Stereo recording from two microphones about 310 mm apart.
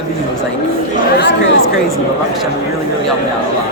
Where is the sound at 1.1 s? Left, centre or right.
Left.